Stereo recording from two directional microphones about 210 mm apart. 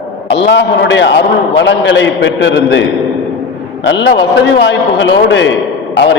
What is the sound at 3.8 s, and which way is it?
A man's voice, 55° left (ahead or behind).